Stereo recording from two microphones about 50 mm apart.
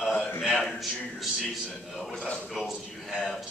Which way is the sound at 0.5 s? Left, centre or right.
Centre.